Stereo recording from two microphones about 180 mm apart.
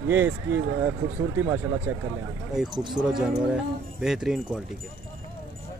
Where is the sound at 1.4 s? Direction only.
15° right (ahead or behind).